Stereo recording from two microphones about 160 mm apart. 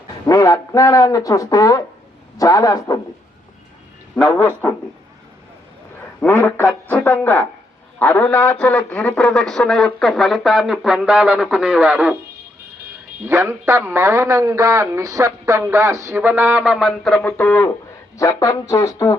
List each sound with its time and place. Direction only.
0.3 s speech: 20° left (ahead or behind)
6.1 s a man's voice: 10° left (ahead or behind); by 12.1 s 10° right (ahead or behind)
13.2 s a man's voice: 15° right (ahead or behind); by 19.1 s 20° left (ahead or behind)